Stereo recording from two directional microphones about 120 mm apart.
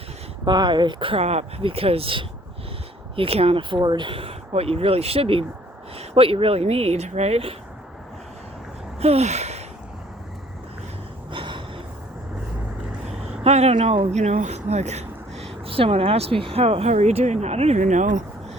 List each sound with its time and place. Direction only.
0.4 s speech: 40° right (ahead or behind); by 7.5 s 60° right (ahead or behind)
9.0 s a sound: 60° right (ahead or behind)
11.3 s gasp: 45° right (ahead or behind)
13.4 s speech: 60° right (ahead or behind)
14.1 s speech: 75° right (ahead or behind)
15.6 s speech: 50° right (ahead or behind); by 18.2 s 90° right